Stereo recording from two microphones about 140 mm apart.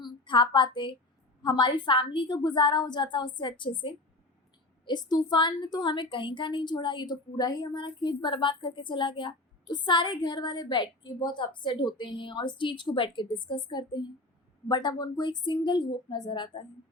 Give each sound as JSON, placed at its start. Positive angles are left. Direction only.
{"t": 0.0, "sound": "a woman's voice", "side_deg": 35}